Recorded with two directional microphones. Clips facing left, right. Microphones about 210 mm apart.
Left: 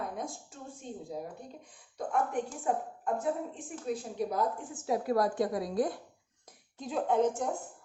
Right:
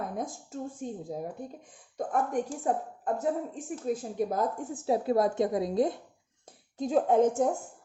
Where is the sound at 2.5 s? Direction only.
35° right (ahead or behind).